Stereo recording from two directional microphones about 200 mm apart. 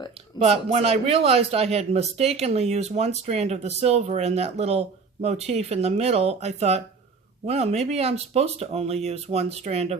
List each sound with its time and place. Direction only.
0.3 s speech: 30° right (ahead or behind)